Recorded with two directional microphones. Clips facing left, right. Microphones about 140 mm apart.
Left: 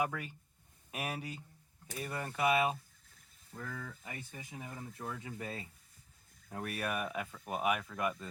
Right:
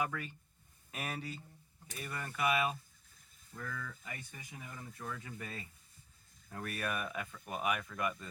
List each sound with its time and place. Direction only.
0.0 s speech: 10° left (ahead or behind)
2.0 s speech: 25° left (ahead or behind)
6.5 s speech: 10° left (ahead or behind)